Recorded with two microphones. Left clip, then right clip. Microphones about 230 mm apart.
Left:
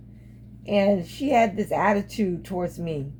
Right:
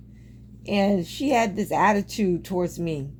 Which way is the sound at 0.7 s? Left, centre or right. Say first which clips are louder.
Left 2 dB; right.